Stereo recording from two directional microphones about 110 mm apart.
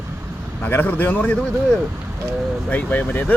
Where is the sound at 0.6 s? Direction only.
15° left (ahead or behind).